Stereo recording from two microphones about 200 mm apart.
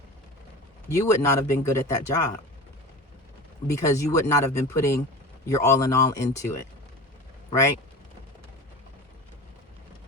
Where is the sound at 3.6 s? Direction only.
15° left (ahead or behind).